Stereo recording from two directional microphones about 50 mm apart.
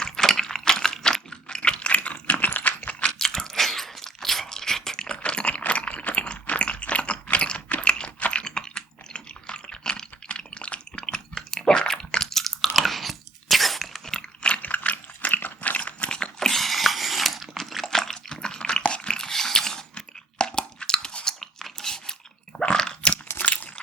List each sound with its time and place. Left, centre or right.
0.0 s typing: centre; by 2.9 s left
3.0 s crunch: centre
7.8 s typing: left
14.5 s dog: left; by 21.3 s centre
21.4 s crunch: centre
23.4 s a sound: left